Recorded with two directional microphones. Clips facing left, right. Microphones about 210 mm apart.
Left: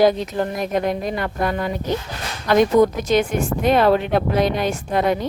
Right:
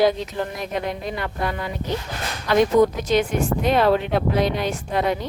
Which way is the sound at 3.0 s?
50° left (ahead or behind).